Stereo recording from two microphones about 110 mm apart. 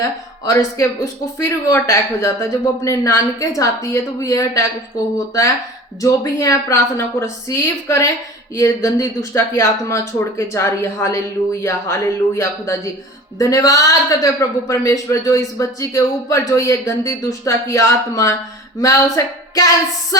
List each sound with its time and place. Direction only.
0.0 s a man's voice: 30° left (ahead or behind)